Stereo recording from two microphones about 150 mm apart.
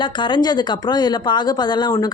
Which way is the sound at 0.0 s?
30° left (ahead or behind).